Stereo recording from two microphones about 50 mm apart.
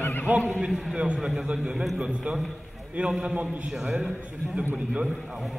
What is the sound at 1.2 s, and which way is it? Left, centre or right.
A man's voice, centre.